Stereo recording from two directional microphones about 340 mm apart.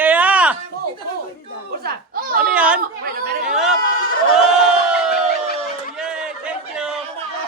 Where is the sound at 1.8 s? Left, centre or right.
Right.